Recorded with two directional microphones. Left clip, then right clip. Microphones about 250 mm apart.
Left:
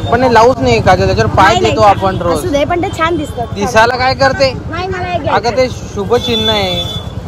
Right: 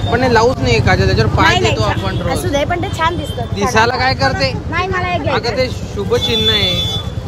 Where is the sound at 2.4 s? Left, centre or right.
Centre.